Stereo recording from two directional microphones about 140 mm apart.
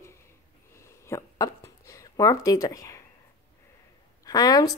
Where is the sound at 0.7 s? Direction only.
20° left (ahead or behind).